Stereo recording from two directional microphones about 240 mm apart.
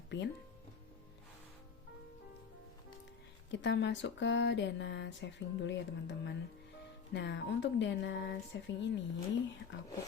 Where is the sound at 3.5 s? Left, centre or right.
Left.